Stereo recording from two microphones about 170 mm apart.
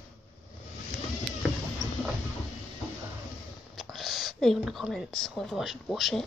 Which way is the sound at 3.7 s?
Centre (ahead or behind).